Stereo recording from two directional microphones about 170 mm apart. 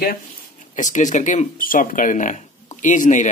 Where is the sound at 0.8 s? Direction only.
45° left (ahead or behind).